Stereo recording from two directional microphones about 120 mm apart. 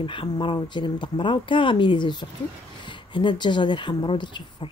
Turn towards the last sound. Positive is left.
turn(degrees=40)  # may be behind; listen again after turning